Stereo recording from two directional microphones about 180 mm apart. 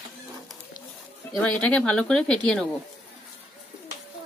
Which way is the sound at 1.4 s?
5° left (ahead or behind).